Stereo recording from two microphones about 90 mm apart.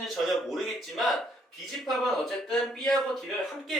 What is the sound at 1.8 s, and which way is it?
Speech, centre (ahead or behind).